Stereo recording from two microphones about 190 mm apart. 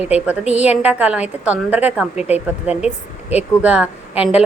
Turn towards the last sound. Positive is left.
turn(degrees=-5)  # may be behind; listen again after turning